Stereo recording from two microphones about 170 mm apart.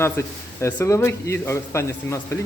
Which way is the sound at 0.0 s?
15° left (ahead or behind).